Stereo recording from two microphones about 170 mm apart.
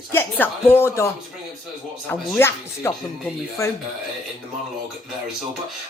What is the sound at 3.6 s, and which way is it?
Speech, 15° left (ahead or behind).